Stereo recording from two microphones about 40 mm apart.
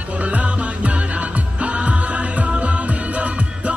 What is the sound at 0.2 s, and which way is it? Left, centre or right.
Music, right.